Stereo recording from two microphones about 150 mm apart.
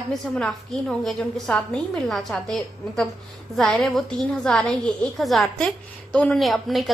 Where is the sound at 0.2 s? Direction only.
5° left (ahead or behind).